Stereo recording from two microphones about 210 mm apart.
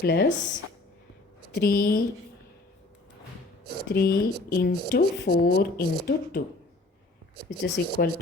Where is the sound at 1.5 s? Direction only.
45° left (ahead or behind).